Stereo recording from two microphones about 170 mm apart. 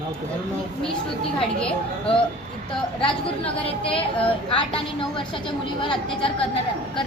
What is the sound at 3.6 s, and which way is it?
A woman's voice, 30° left (ahead or behind).